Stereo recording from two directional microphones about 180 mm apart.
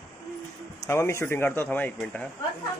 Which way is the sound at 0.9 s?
15° left (ahead or behind).